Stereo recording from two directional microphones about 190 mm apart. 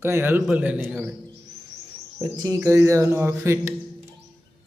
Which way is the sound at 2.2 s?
15° right (ahead or behind).